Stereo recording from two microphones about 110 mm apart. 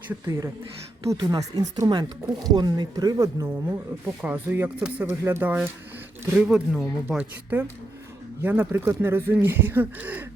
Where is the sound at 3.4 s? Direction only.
15° right (ahead or behind).